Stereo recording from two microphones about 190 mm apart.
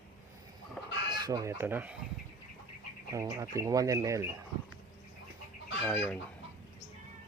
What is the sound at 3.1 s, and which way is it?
Speech, 15° right (ahead or behind).